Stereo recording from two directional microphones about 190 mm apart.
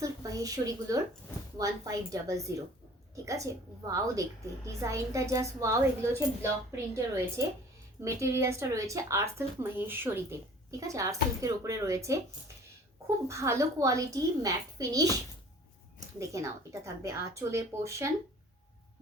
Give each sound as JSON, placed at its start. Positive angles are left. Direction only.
{"t": 0.0, "sound": "a woman's voice", "side_deg": -20}
{"t": 13.2, "sound": "a woman's voice", "side_deg": -15}
{"t": 16.1, "sound": "a woman's voice", "side_deg": -15}